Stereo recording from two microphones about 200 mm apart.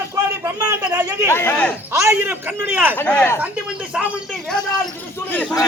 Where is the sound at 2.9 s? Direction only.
5° left (ahead or behind).